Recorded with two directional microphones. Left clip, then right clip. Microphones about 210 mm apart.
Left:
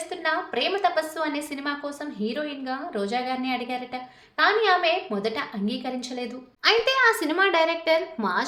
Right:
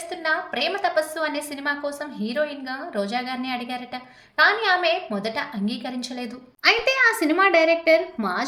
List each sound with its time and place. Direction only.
0.3 s a woman's voice: 5° right (ahead or behind)